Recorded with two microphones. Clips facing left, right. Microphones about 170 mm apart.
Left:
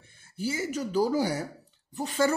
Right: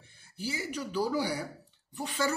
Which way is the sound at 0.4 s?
45° left (ahead or behind).